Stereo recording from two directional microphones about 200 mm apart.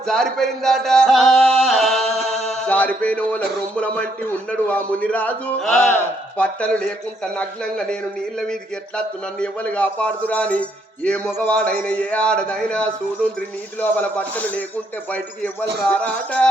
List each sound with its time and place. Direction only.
0.1 s music: centre (ahead or behind)
9.0 s music: 5° left (ahead or behind)
13.9 s a man's voice: 10° left (ahead or behind)
16.0 s a man's voice: 5° left (ahead or behind)